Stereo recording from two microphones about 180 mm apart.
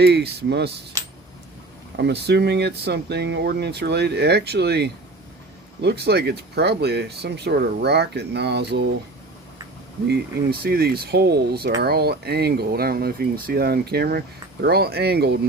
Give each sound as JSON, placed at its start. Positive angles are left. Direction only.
{"t": 0.0, "sound": "speech", "side_deg": -65}
{"t": 2.0, "sound": "speech", "side_deg": -65}
{"t": 10.1, "sound": "speech", "side_deg": -60}